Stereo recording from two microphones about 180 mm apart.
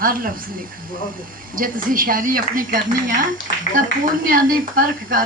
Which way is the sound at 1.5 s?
50° right (ahead or behind).